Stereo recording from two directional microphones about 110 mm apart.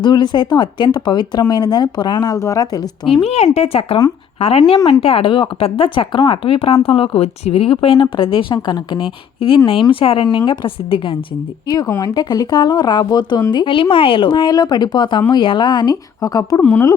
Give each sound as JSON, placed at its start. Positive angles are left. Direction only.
{"t": 0.0, "sound": "speech", "side_deg": 40}
{"t": 3.1, "sound": "speech", "side_deg": 65}
{"t": 11.7, "sound": "speech", "side_deg": 35}
{"t": 16.6, "sound": "speech", "side_deg": 15}